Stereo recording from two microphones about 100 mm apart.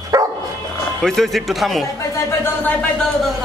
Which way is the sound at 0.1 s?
35° right (ahead or behind).